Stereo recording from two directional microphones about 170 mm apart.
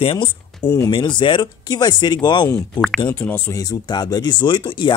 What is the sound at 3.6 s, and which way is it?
Speech, 25° left (ahead or behind).